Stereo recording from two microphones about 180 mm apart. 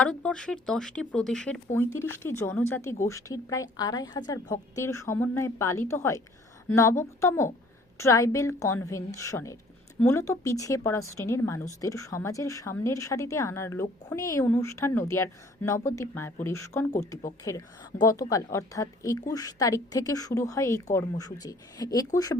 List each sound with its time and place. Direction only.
0.0 s a woman's voice: 5° left (ahead or behind)